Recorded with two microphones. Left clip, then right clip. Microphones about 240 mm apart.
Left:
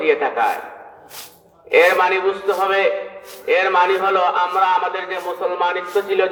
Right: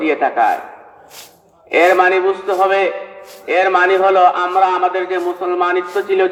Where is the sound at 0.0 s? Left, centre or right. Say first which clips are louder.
Right 2 dB; right.